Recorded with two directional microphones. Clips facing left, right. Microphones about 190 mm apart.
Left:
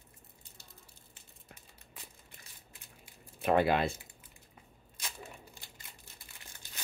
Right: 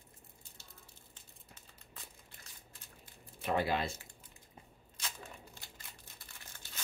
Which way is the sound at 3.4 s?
60° left (ahead or behind).